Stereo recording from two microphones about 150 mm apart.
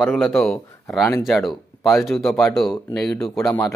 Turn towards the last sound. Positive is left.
turn(degrees=20)  # may be behind; listen again after turning